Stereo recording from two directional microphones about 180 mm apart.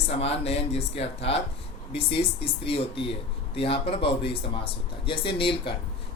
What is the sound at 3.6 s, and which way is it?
Speech, 30° left (ahead or behind).